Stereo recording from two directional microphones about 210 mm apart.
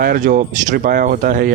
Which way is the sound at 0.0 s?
40° right (ahead or behind).